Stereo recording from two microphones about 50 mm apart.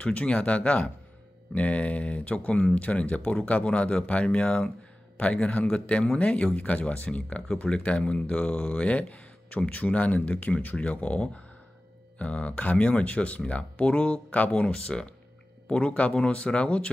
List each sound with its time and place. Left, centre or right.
0.0 s speech: left